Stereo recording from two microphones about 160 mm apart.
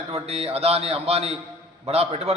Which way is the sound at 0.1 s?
40° right (ahead or behind).